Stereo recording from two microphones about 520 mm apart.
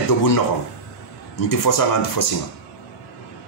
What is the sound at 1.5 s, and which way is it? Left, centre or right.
Speech, left.